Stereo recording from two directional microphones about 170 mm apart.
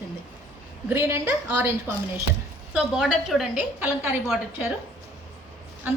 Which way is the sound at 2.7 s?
5° right (ahead or behind).